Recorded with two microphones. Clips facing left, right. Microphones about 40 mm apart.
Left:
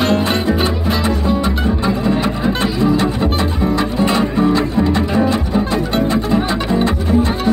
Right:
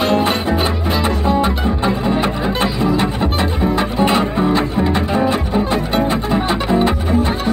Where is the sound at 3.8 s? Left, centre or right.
Right.